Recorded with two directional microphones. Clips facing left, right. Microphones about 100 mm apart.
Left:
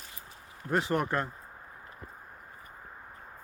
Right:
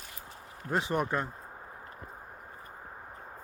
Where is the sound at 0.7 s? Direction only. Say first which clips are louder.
Left 1 dB; 15° right (ahead or behind).